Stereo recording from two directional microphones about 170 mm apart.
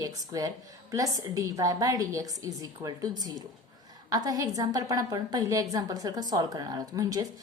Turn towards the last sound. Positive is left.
turn(degrees=-20)  # may be behind; listen again after turning